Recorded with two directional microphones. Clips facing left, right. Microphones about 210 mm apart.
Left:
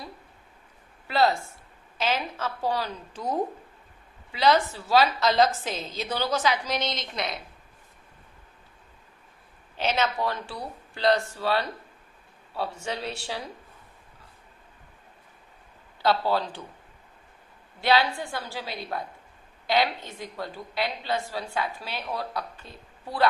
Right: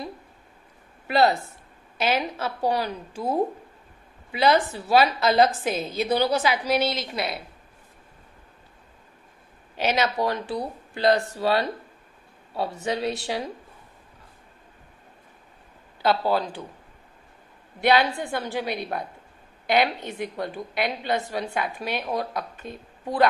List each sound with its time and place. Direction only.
1.0 s a woman's voice: 15° right (ahead or behind)
4.3 s a woman's voice: 15° right (ahead or behind)
9.8 s a woman's voice: 10° right (ahead or behind)
12.8 s a woman's voice: 15° right (ahead or behind)
16.0 s a woman's voice: 15° right (ahead or behind)
17.7 s a woman's voice: 15° right (ahead or behind)